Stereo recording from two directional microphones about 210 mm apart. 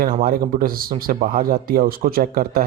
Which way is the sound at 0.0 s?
40° right (ahead or behind).